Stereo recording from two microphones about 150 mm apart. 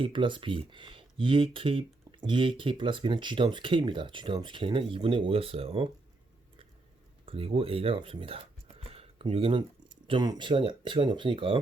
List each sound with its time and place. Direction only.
0.0 s speech: 35° right (ahead or behind)
7.3 s speech: 40° right (ahead or behind)